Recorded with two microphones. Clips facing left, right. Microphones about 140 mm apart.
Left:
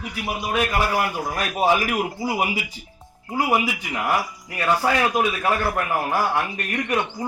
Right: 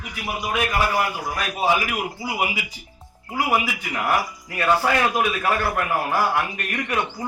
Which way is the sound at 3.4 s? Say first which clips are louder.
Left 1 dB; 20° left (ahead or behind).